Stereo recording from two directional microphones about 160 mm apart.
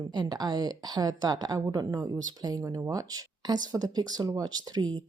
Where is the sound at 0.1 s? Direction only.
25° right (ahead or behind).